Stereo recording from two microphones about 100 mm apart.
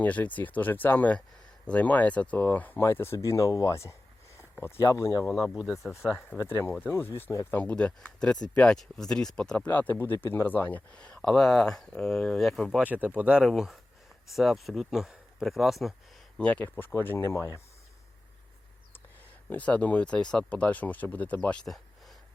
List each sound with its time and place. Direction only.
0.0 s speech: 15° left (ahead or behind)
5.2 s speech: 5° right (ahead or behind)
6.1 s speech: 25° left (ahead or behind); by 12.8 s centre (ahead or behind)
12.8 s speech: 15° right (ahead or behind)
13.4 s speech: centre (ahead or behind)
16.4 s speech: 15° left (ahead or behind)
16.6 s speech: 25° left (ahead or behind)
19.5 s speech: 15° left (ahead or behind)